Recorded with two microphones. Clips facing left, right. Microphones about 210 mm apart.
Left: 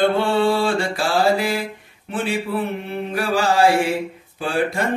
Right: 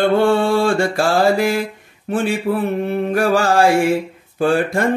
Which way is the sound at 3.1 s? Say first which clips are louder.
Right 3 dB; 45° right (ahead or behind).